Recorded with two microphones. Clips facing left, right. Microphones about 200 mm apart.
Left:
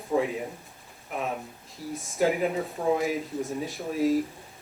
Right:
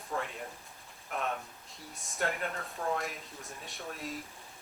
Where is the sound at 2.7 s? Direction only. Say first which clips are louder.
Left 9 dB; 15° left (ahead or behind).